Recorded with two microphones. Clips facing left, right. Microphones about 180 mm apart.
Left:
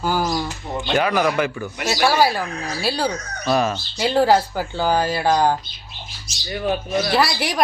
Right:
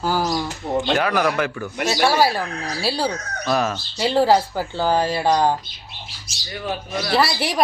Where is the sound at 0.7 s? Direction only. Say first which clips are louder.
Right 10 dB; 35° right (ahead or behind).